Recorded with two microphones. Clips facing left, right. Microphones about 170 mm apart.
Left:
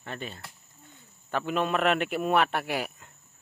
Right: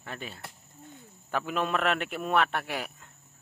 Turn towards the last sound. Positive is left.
turn(degrees=5)  # may be behind; listen again after turning